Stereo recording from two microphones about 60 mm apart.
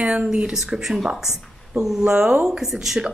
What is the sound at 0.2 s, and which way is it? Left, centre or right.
Speech, centre.